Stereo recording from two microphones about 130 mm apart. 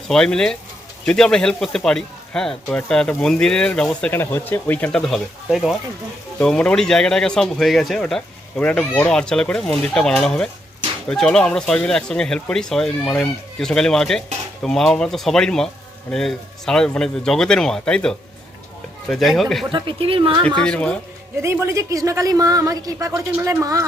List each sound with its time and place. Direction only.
0.1 s a man's voice: 5° left (ahead or behind)
19.7 s speech: 40° right (ahead or behind)
20.6 s a man's voice: 10° left (ahead or behind)
21.4 s speech: 20° right (ahead or behind)